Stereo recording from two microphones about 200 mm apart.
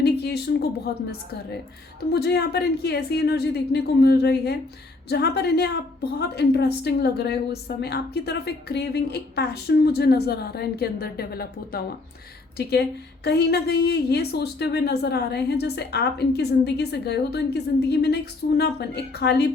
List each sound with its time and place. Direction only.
0.0 s a sound: 55° left (ahead or behind)
0.9 s a woman's voice: 50° left (ahead or behind)
2.1 s a woman's voice: 55° left (ahead or behind)